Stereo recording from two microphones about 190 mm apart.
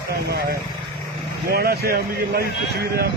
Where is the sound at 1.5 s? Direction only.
55° right (ahead or behind).